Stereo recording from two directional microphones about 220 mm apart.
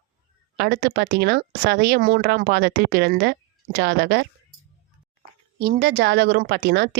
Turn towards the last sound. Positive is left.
turn(degrees=-50)  # may be behind; listen again after turning